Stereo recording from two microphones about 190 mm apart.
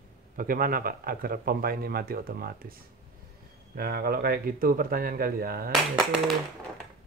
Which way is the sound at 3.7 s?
55° right (ahead or behind).